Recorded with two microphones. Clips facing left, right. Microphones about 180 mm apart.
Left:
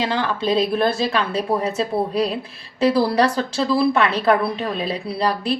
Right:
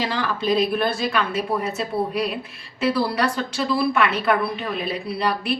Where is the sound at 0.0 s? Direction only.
25° left (ahead or behind).